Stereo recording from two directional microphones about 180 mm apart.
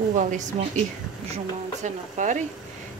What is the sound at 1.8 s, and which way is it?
Speech, 45° right (ahead or behind).